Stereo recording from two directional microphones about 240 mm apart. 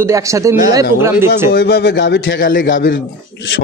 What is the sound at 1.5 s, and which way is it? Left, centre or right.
A man's voice, left.